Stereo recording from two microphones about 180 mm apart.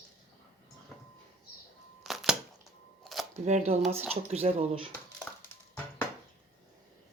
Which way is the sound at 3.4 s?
40° right (ahead or behind).